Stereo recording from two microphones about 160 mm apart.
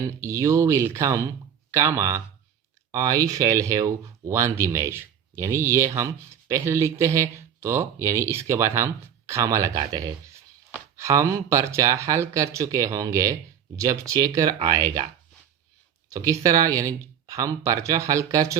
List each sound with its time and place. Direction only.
0.1 s speech: 20° right (ahead or behind)
16.0 s speech: 20° right (ahead or behind)